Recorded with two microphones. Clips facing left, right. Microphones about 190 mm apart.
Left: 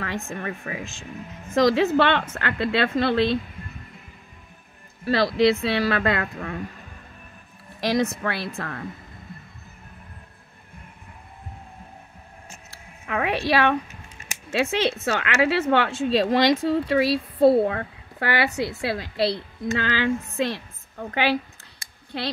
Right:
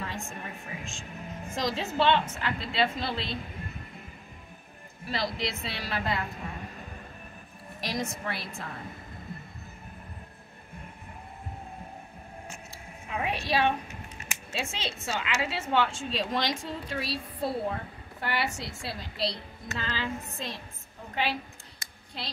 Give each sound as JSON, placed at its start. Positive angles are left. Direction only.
{"t": 0.3, "sound": "speech", "side_deg": 90}
{"t": 1.5, "sound": "speech", "side_deg": 75}
{"t": 5.0, "sound": "speech", "side_deg": 80}
{"t": 7.8, "sound": "speech", "side_deg": 80}
{"t": 12.7, "sound": "a woman's voice", "side_deg": 85}
{"t": 14.5, "sound": "speech", "side_deg": 70}